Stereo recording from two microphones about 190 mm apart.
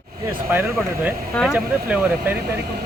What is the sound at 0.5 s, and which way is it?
Speech, 10° right (ahead or behind).